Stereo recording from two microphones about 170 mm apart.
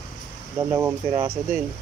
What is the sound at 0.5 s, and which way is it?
Speech, 15° right (ahead or behind).